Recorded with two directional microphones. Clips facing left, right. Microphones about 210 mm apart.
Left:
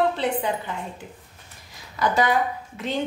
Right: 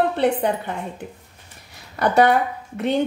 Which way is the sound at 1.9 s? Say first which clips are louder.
Right 5 dB; 60° right (ahead or behind).